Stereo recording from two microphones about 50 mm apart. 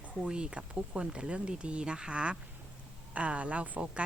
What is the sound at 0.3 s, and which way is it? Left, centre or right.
Speech, centre.